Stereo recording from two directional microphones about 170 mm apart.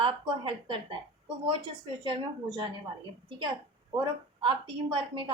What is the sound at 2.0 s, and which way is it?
Speech, 30° right (ahead or behind).